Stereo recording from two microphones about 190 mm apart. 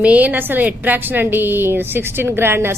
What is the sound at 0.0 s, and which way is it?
A woman's voice, 10° right (ahead or behind).